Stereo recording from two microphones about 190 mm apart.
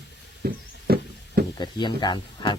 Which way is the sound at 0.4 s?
55° right (ahead or behind).